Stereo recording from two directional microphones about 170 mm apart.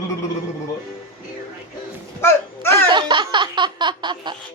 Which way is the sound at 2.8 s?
25° right (ahead or behind).